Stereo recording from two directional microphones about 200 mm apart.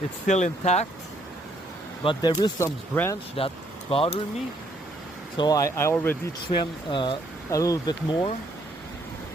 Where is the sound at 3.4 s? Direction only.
30° left (ahead or behind).